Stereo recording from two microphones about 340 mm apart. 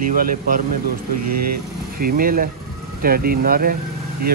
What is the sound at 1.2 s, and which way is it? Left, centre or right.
Speech, right.